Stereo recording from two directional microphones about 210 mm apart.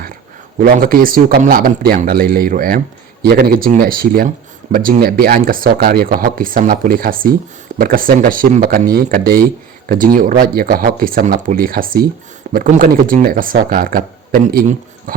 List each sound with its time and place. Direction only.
0.6 s a man's voice: 45° right (ahead or behind)